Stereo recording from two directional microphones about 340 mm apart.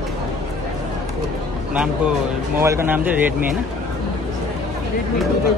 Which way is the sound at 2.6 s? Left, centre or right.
Centre.